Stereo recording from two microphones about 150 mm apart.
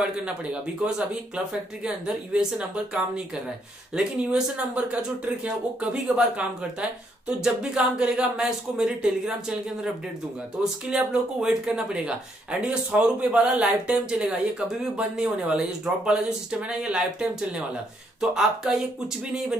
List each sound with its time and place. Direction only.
0.2 s speech: 5° right (ahead or behind)